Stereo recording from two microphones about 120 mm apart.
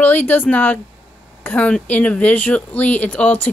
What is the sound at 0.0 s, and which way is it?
Speech, 15° left (ahead or behind).